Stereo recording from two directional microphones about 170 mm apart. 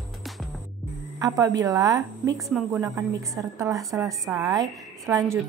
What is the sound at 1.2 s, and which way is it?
Speech, 20° right (ahead or behind).